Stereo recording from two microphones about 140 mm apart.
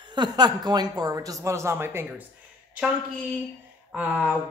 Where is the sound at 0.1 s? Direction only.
30° right (ahead or behind).